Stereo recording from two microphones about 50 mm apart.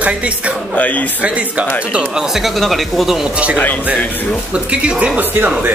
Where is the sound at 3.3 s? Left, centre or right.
Right.